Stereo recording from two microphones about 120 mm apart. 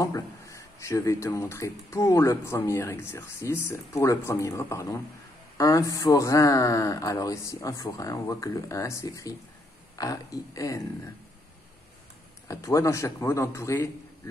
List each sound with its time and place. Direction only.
0.0 s speech: 25° left (ahead or behind)
12.4 s speech: 25° left (ahead or behind)